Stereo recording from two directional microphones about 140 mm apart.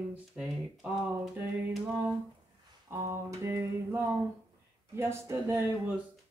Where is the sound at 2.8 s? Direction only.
20° right (ahead or behind).